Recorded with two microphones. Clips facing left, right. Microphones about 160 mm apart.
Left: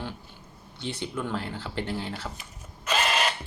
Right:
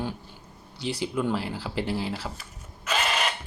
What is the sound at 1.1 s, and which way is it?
Speech, 10° right (ahead or behind).